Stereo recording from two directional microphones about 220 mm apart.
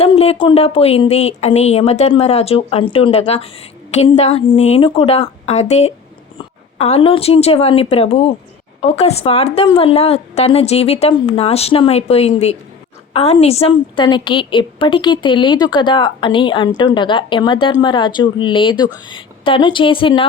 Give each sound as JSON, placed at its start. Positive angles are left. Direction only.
{"t": 0.0, "sound": "a woman's voice", "side_deg": 25}